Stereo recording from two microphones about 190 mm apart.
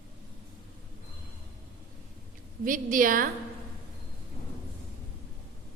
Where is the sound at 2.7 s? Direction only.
45° right (ahead or behind).